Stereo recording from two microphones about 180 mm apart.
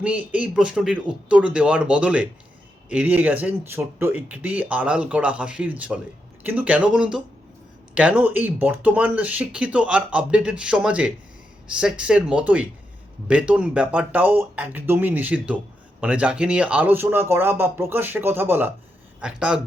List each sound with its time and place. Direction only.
0.0 s speech: 10° right (ahead or behind)